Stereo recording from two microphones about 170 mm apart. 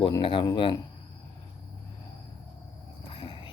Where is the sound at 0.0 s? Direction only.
30° left (ahead or behind).